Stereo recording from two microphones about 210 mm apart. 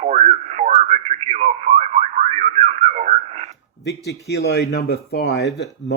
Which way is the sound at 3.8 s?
55° left (ahead or behind).